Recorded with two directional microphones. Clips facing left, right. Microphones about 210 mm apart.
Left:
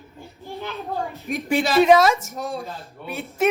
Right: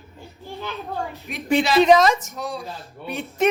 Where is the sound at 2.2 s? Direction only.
45° left (ahead or behind).